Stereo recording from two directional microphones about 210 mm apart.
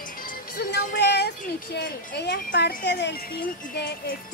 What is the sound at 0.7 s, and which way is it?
A woman's voice, 50° left (ahead or behind).